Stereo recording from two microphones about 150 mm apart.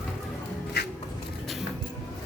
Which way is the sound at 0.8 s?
90° left.